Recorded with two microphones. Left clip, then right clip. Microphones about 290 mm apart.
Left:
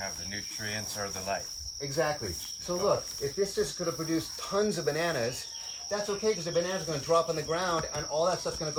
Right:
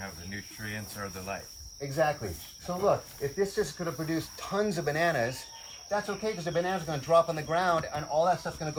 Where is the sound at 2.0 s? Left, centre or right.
Centre.